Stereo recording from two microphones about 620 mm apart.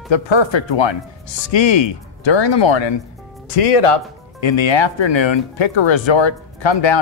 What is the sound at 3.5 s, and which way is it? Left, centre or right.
Speech, left.